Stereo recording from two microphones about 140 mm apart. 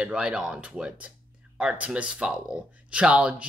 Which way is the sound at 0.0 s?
5° right (ahead or behind).